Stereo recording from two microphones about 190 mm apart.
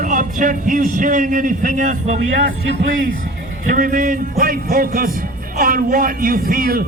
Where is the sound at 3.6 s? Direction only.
45° right (ahead or behind).